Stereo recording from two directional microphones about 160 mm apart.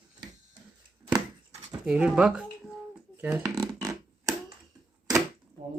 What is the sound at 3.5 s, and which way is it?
Synthesizer, 20° right (ahead or behind).